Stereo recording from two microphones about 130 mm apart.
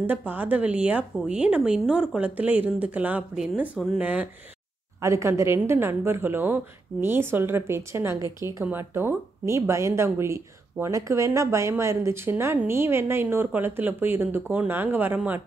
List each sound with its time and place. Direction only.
0.0 s speech: 15° right (ahead or behind)
5.0 s speech: 25° right (ahead or behind)